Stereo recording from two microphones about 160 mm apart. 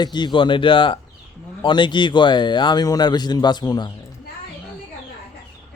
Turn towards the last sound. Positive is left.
turn(degrees=25)  # may be behind; listen again after turning